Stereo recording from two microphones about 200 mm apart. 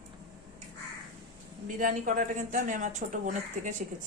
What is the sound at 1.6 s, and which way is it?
Speech, 40° right (ahead or behind).